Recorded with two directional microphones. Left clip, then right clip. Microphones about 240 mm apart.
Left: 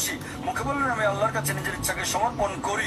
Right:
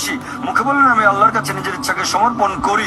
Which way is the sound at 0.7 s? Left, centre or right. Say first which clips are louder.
Right 13 dB; right.